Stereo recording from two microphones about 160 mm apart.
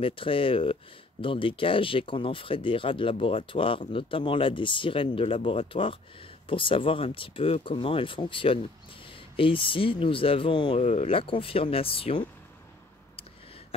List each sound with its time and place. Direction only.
0.0 s speech: 35° left (ahead or behind)